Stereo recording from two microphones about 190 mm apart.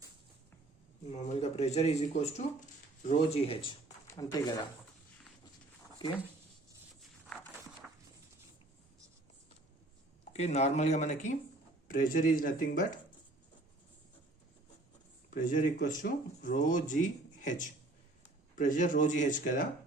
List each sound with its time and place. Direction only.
1.1 s speech: 35° left (ahead or behind); by 4.6 s 20° left (ahead or behind)
6.0 s speech: 20° left (ahead or behind)
10.3 s speech: 35° left (ahead or behind)
15.3 s speech: 45° left (ahead or behind)